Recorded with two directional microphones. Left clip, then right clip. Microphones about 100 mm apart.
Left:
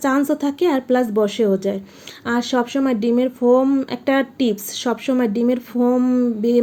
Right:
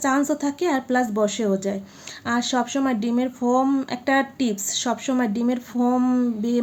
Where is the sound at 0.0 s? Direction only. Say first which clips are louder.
Left 3 dB; 25° left (ahead or behind).